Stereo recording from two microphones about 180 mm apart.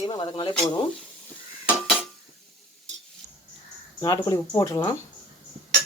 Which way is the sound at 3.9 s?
20° left (ahead or behind).